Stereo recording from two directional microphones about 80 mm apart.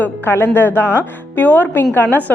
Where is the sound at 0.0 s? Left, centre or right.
Left.